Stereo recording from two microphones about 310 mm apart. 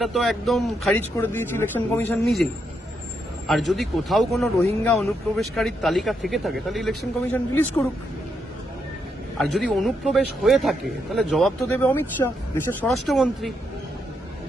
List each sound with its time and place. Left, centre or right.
0.0 s a man's voice: centre
3.4 s a man's voice: centre
9.4 s a man's voice: centre